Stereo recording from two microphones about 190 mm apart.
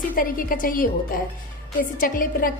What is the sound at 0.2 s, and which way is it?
A woman's voice, 45° left (ahead or behind).